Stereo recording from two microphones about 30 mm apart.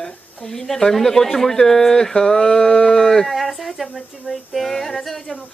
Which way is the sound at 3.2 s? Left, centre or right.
Centre.